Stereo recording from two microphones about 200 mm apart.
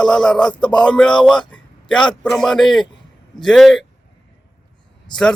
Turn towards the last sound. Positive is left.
turn(degrees=20)  # may be behind; listen again after turning